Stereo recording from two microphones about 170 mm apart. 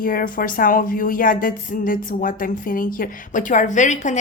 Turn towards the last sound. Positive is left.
turn(degrees=45)  # may be behind; listen again after turning